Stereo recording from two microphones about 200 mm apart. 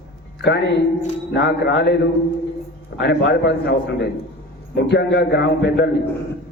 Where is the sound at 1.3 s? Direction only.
60° left (ahead or behind).